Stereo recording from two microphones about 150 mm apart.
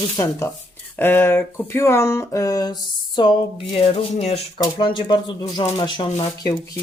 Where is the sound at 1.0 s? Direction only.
15° left (ahead or behind); by 4.4 s 45° left (ahead or behind).